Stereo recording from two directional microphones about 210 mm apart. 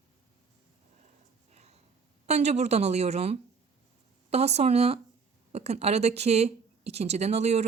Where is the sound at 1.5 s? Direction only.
30° right (ahead or behind).